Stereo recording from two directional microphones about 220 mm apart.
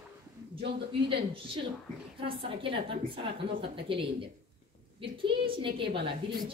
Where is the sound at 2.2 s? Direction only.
25° right (ahead or behind).